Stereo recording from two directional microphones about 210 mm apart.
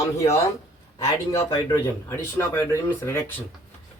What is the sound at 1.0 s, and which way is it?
Speech, 15° left (ahead or behind).